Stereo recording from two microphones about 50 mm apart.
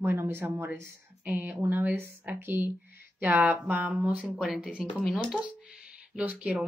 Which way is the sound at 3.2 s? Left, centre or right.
Right.